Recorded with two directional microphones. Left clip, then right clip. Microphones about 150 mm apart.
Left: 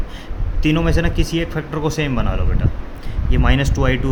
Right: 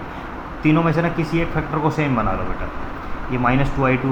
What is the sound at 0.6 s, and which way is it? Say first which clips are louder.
Speech: right 1 dB; 65° left (ahead or behind).